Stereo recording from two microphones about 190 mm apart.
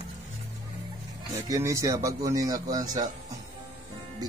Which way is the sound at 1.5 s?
15° right (ahead or behind).